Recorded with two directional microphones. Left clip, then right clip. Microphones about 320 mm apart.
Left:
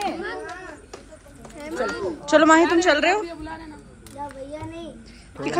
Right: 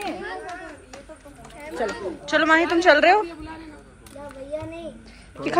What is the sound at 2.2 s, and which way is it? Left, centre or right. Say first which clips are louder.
A woman's voice: left 3 dB; centre.